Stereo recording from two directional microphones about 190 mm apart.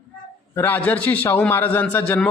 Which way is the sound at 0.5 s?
10° left (ahead or behind).